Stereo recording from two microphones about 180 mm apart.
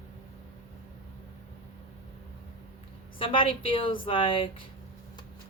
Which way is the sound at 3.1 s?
30° left (ahead or behind).